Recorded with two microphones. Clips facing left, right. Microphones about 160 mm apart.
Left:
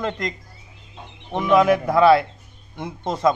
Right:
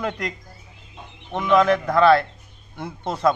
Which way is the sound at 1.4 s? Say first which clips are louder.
Left 1 dB; 5° left (ahead or behind).